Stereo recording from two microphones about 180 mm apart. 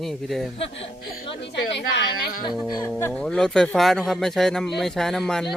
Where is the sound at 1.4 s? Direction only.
75° left (ahead or behind).